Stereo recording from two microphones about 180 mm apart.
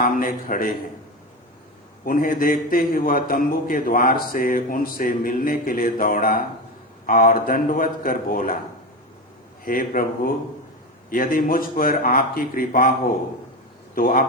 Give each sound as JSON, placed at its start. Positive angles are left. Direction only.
{"t": 0.0, "sound": "a man's voice", "side_deg": 50}
{"t": 2.0, "sound": "a man's voice", "side_deg": 50}
{"t": 9.6, "sound": "a man's voice", "side_deg": 50}